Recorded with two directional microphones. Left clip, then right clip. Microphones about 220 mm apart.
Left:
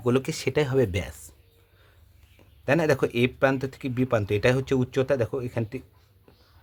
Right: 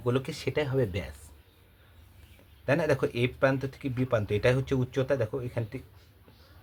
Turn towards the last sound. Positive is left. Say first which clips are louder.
# left 4 dB
turn(degrees=45)  # may be behind; listen again after turning